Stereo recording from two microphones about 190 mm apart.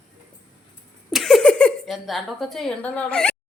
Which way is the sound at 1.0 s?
Centre (ahead or behind).